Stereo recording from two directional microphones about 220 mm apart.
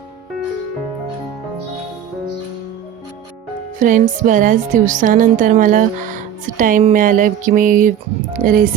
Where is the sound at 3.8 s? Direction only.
35° right (ahead or behind).